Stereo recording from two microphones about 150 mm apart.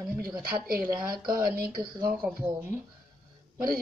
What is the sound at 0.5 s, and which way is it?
Speech, 80° right.